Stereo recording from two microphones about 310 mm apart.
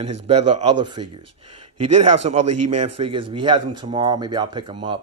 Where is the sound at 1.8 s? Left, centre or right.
Right.